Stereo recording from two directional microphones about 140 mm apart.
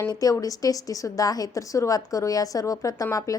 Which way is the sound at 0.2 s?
25° left (ahead or behind).